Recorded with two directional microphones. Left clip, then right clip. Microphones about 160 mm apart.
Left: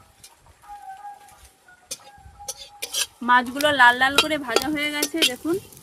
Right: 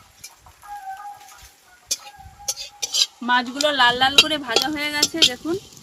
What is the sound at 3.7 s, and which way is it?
Speech, 20° left (ahead or behind).